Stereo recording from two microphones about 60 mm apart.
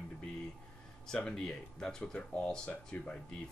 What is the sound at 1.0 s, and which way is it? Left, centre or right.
Speech, centre.